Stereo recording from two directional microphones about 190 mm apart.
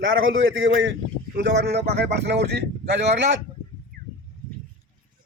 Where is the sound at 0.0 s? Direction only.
90° right.